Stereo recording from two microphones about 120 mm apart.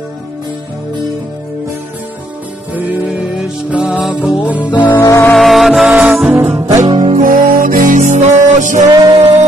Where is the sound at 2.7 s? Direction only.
15° right (ahead or behind).